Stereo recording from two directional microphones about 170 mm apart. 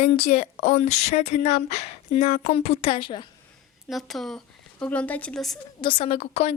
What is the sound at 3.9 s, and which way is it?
Speech, centre (ahead or behind).